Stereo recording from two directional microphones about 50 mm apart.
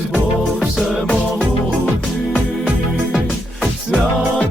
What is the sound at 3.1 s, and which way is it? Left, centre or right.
Music, centre.